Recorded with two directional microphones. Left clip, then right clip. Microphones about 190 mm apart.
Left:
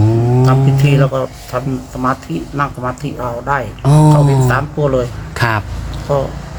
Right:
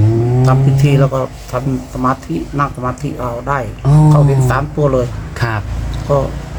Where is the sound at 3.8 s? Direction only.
50° left (ahead or behind).